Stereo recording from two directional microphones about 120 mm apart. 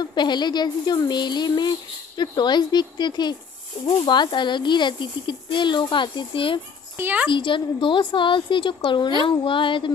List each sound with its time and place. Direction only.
0.0 s speech: 40° left (ahead or behind)
7.0 s speech: 15° right (ahead or behind)
7.2 s a woman's voice: 45° left (ahead or behind)